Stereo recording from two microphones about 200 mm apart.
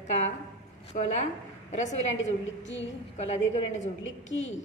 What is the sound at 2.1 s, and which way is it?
Speech, 70° left (ahead or behind).